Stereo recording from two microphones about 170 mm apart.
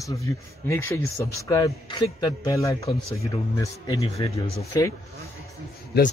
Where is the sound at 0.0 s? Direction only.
20° left (ahead or behind).